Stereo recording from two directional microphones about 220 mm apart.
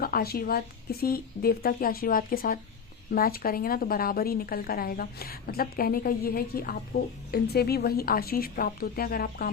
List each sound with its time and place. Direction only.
0.0 s a woman's voice: 45° left (ahead or behind)